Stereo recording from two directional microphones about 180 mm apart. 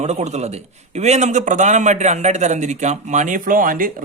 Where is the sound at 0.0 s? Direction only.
40° right (ahead or behind).